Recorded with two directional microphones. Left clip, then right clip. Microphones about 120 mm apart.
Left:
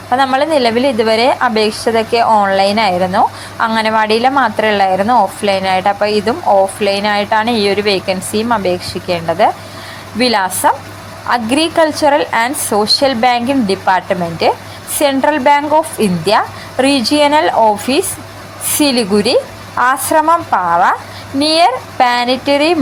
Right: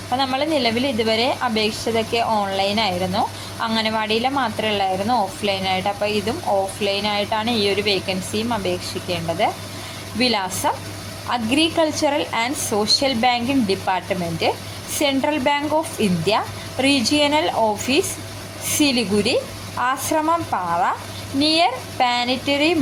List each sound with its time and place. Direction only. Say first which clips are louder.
0.1 s a woman's voice: left 9 dB; 20° left (ahead or behind)